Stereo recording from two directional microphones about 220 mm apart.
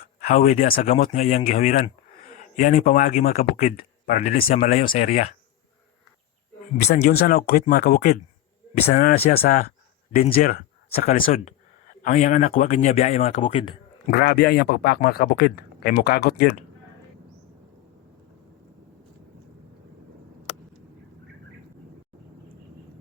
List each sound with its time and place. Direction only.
0.2 s speech: 35° left (ahead or behind)
6.7 s speech: 40° left (ahead or behind)
14.1 s speech: 45° left (ahead or behind)